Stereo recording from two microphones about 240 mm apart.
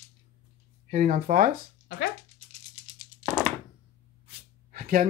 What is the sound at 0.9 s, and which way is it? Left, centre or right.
Speech, right.